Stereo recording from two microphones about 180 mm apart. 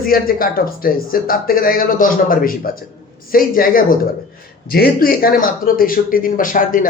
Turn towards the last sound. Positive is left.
turn(degrees=50)  # may be behind; listen again after turning